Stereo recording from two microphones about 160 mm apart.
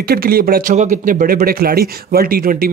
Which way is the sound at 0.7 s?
50° right (ahead or behind).